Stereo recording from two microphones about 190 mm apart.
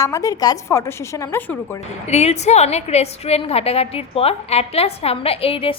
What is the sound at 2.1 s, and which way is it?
A woman's voice, 35° left (ahead or behind).